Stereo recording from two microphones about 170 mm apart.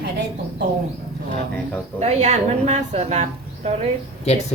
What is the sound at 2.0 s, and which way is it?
Speech, 40° right (ahead or behind).